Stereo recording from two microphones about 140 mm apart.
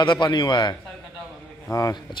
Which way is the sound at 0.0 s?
35° left (ahead or behind).